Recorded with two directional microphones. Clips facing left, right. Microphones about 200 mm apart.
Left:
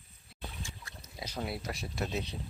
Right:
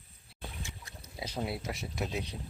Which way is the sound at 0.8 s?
25° right (ahead or behind).